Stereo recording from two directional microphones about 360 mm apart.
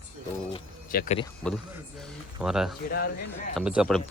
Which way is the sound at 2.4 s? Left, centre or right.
Centre.